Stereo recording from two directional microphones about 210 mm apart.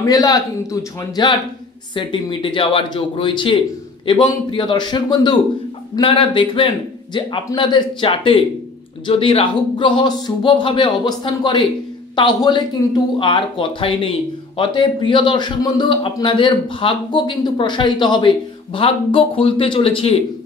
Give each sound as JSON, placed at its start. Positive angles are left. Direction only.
{"t": 0.0, "sound": "a man's voice", "side_deg": 15}